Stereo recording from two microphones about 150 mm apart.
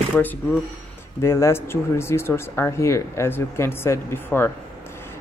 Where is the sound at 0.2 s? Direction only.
10° left (ahead or behind).